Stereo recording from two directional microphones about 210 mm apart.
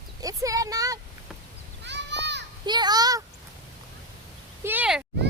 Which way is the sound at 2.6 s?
20° right (ahead or behind).